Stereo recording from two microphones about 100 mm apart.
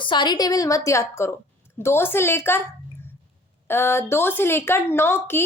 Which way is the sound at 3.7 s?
25° left (ahead or behind).